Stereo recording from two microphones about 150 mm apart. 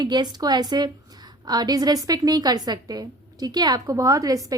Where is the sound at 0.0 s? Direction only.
30° right (ahead or behind).